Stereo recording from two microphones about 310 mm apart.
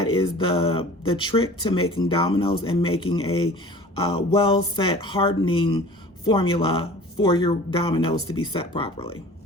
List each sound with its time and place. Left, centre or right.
0.1 s speech: centre